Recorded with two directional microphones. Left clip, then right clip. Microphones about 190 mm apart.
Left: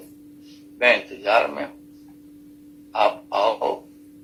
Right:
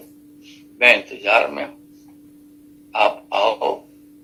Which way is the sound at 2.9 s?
30° right (ahead or behind).